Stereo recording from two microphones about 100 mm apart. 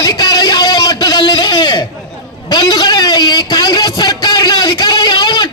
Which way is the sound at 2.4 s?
40° left (ahead or behind).